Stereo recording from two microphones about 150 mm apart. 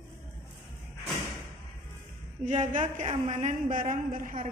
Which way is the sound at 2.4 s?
50° right (ahead or behind).